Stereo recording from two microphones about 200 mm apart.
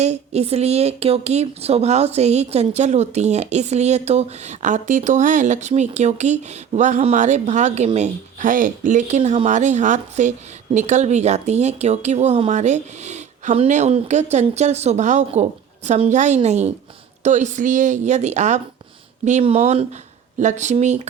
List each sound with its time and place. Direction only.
0.0 s a woman's voice: 30° right (ahead or behind)